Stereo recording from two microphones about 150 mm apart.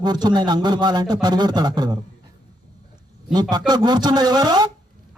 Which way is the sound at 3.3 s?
30° right (ahead or behind).